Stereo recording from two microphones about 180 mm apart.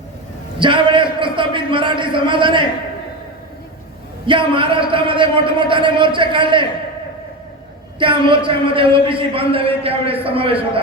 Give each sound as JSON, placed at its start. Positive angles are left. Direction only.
{"t": 0.6, "sound": "a man's voice", "side_deg": -25}
{"t": 4.3, "sound": "a man's voice", "side_deg": -30}
{"t": 7.9, "sound": "a man's voice", "side_deg": -25}